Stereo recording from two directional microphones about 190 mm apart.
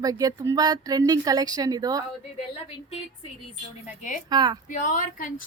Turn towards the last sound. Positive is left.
turn(degrees=45)  # may be behind; listen again after turning